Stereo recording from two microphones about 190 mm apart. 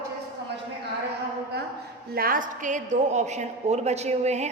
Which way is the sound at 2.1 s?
50° right (ahead or behind).